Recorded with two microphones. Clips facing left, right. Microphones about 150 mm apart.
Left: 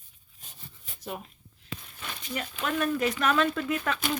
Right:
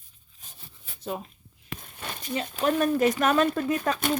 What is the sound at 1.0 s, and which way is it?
Speech, 25° right (ahead or behind).